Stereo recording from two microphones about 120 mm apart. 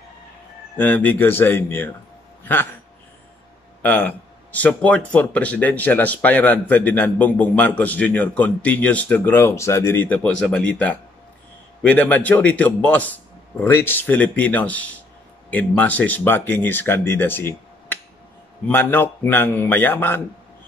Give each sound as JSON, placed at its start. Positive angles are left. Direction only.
{"t": 0.7, "sound": "a man's voice", "side_deg": 15}
{"t": 3.8, "sound": "a man's voice", "side_deg": 15}